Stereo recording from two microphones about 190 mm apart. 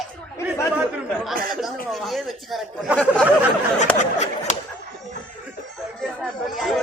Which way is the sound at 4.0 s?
40° left (ahead or behind).